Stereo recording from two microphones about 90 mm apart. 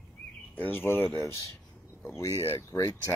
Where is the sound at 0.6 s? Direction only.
20° left (ahead or behind).